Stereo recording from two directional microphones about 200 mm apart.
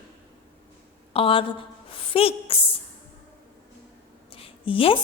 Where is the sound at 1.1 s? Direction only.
25° left (ahead or behind).